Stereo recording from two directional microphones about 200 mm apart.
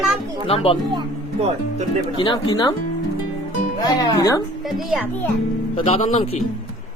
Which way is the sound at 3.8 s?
20° left (ahead or behind).